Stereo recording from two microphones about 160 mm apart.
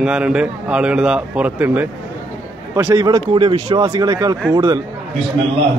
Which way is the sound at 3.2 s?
30° right (ahead or behind).